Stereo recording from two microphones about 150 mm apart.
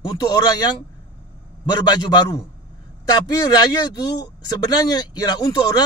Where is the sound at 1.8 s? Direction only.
30° left (ahead or behind).